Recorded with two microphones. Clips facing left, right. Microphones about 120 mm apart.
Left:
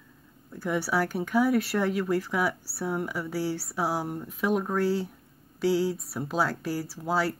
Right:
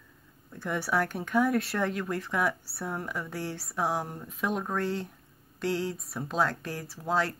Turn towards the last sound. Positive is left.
turn(degrees=5)  # may be behind; listen again after turning